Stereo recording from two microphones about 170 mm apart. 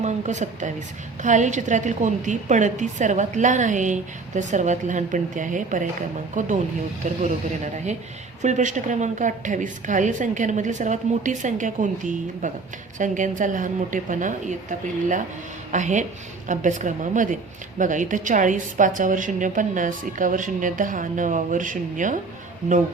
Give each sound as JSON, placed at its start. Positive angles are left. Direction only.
{"t": 0.0, "sound": "a woman's voice", "side_deg": -45}
{"t": 8.4, "sound": "a woman's voice", "side_deg": -45}